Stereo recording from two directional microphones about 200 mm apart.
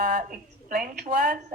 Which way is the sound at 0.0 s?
45° right (ahead or behind).